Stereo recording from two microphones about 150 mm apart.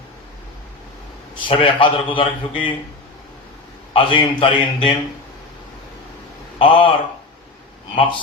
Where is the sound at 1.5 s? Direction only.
35° left (ahead or behind).